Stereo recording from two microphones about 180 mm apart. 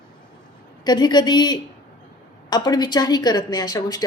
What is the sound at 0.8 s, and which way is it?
A woman's voice, 25° left (ahead or behind).